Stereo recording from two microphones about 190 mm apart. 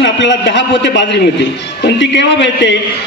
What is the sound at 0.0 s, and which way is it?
A man's voice, 70° left (ahead or behind).